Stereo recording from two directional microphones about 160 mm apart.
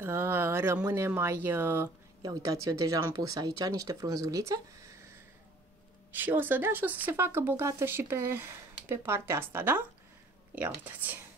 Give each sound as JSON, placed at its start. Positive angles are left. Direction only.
{"t": 0.0, "sound": "speech", "side_deg": -15}
{"t": 6.1, "sound": "speech", "side_deg": -10}